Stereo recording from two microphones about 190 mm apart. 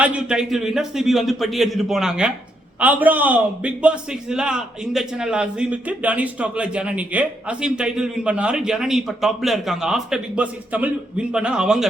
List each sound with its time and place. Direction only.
0.0 s a man's voice: 5° right (ahead or behind)